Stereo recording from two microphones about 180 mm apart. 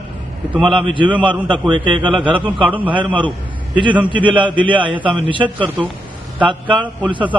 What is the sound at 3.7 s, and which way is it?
A man's voice, 25° right (ahead or behind).